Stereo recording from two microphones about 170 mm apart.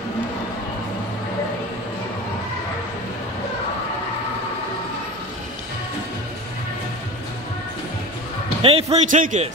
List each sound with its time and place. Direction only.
8.6 s a man's voice: 40° right (ahead or behind)